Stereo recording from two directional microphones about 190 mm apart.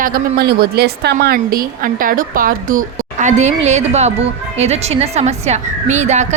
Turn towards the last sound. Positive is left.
turn(degrees=-35)  # may be behind; listen again after turning